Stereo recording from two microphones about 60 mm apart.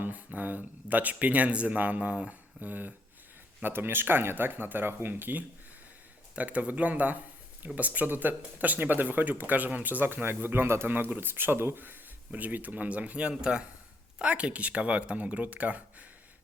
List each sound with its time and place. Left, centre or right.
0.0 s speech: right
3.6 s speech: right